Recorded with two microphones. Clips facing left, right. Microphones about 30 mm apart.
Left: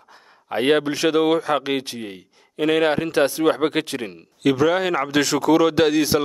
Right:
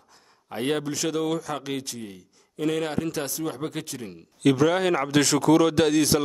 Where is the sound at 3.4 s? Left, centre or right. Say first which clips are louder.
Left 11 dB; left.